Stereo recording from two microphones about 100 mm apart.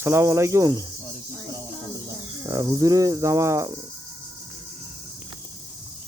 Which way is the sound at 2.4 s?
35° right (ahead or behind).